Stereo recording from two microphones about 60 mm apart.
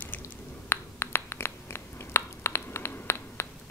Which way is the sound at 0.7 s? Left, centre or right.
Left.